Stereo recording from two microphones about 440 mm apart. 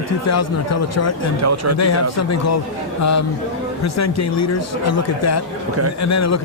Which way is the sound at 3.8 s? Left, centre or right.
Left.